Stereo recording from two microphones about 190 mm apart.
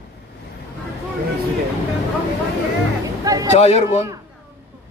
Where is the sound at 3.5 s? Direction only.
35° left (ahead or behind).